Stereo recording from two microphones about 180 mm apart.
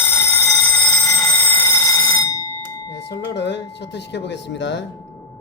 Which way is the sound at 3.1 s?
70° left (ahead or behind).